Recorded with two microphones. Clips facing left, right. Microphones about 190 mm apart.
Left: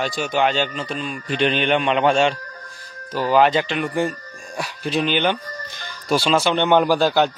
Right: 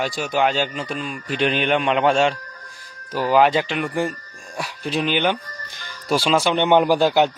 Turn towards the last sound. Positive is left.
turn(degrees=-20)  # may be behind; listen again after turning